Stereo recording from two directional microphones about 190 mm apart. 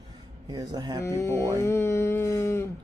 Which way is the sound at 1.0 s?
15° left (ahead or behind).